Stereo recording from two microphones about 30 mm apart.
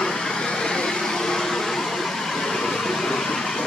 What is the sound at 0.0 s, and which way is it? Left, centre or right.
Vehicle, left.